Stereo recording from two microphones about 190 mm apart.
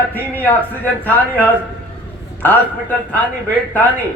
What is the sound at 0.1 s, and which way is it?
A man's voice, 10° left (ahead or behind).